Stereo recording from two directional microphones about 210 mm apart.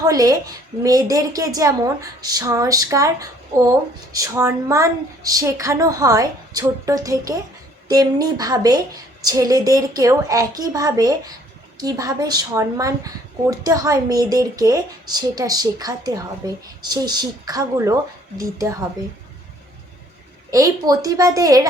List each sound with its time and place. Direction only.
0.1 s speech: 15° right (ahead or behind)
20.5 s speech: 15° right (ahead or behind)